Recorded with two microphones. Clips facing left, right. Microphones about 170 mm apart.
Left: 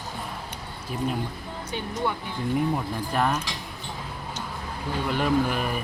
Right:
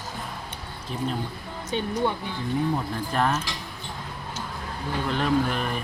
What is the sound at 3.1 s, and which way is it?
Speech, 5° left (ahead or behind).